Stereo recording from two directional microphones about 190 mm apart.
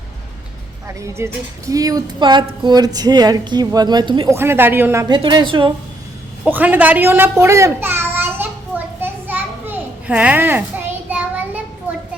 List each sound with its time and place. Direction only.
0.9 s speech: 15° right (ahead or behind)
4.4 s a woman's voice: 10° right (ahead or behind)
6.4 s babbling: 10° right (ahead or behind)
11.1 s child singing: 10° right (ahead or behind)